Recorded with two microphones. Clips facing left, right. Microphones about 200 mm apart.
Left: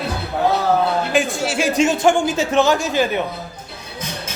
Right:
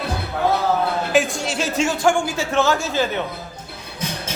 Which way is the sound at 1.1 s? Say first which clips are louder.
Even; centre (ahead or behind).